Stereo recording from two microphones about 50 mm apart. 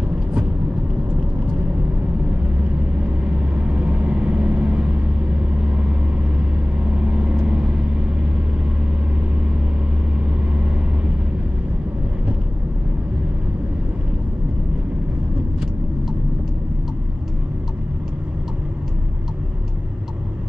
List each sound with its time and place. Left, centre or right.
3.0 s vehicle: right